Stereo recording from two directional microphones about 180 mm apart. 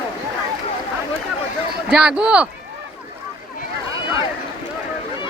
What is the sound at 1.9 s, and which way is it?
Speech, 5° right (ahead or behind).